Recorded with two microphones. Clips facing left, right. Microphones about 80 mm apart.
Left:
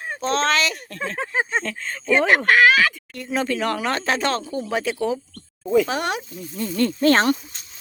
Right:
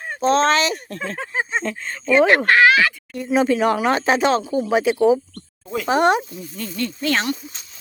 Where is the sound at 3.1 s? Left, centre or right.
Centre.